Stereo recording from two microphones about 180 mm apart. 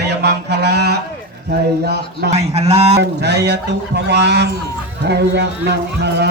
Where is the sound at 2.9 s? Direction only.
65° right (ahead or behind).